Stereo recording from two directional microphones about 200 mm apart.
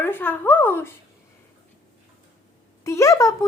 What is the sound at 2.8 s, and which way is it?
Speech, 15° left (ahead or behind).